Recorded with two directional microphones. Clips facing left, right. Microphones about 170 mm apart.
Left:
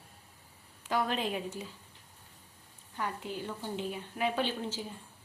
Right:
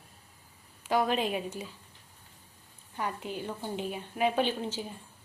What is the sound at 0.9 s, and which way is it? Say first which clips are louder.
Speech: right 4 dB; 15° right (ahead or behind).